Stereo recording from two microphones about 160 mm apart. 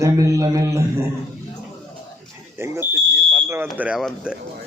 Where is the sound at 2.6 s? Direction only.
15° right (ahead or behind).